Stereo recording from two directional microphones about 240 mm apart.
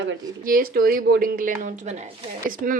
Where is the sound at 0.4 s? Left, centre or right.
Right.